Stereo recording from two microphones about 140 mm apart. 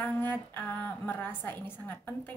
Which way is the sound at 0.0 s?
15° left (ahead or behind).